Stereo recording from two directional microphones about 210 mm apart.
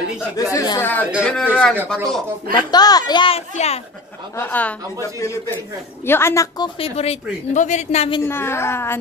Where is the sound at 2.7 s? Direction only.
20° left (ahead or behind).